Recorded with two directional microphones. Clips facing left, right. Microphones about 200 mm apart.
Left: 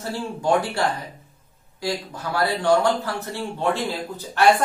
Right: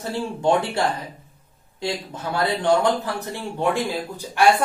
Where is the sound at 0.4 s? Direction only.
25° right (ahead or behind).